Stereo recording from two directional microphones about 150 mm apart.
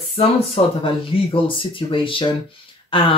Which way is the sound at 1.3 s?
35° left (ahead or behind).